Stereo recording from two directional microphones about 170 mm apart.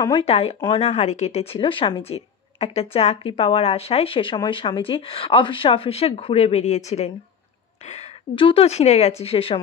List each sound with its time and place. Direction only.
0.2 s speech: 35° left (ahead or behind)